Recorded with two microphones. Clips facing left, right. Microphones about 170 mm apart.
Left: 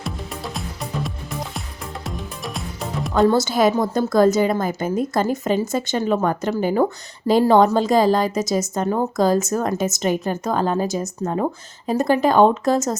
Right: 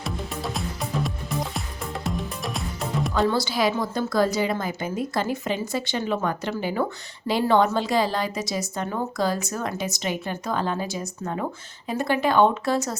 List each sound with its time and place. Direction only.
0.0 s music: centre (ahead or behind)
3.2 s a woman's voice: 45° left (ahead or behind)